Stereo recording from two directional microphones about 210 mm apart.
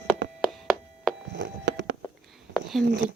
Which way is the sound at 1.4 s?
55° right (ahead or behind).